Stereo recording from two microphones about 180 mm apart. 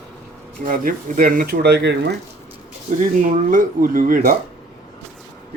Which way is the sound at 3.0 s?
45° right (ahead or behind).